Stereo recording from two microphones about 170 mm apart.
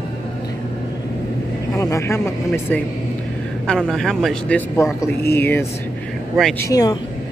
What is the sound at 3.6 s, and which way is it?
Speech, centre (ahead or behind).